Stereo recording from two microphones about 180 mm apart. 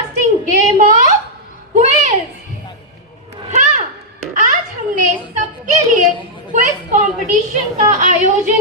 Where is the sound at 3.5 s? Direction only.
40° right (ahead or behind).